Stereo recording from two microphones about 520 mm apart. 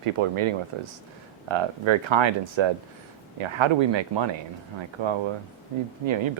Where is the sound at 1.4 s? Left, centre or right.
Right.